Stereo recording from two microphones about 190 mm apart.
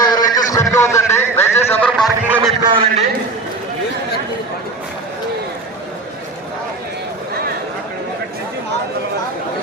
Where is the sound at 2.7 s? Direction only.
25° right (ahead or behind).